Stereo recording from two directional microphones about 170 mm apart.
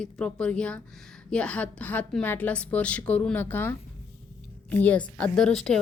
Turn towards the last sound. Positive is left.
turn(degrees=5)  # may be behind; listen again after turning